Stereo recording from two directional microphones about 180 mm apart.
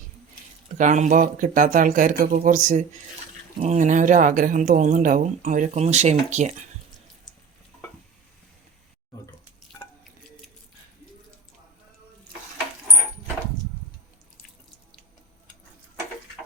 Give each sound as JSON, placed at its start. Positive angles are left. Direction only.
{"t": 0.8, "sound": "speech", "side_deg": -45}